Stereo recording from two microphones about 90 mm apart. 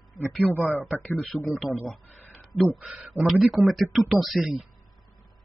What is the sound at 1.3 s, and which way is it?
Speech, centre (ahead or behind).